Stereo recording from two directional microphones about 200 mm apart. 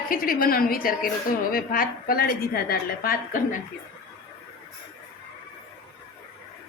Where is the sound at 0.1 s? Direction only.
45° left (ahead or behind).